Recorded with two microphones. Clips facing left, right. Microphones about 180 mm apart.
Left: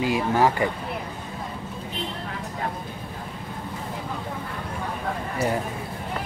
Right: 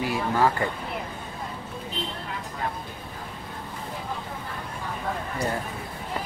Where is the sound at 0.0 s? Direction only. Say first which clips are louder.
Left 3 dB; 15° left (ahead or behind).